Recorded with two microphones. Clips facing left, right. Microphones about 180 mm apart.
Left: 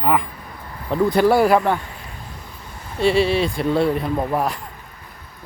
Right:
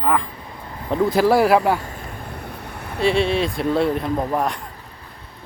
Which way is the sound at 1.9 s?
60° right (ahead or behind).